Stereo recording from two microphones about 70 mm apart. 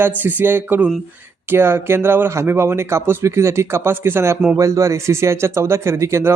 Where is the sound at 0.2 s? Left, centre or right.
Right.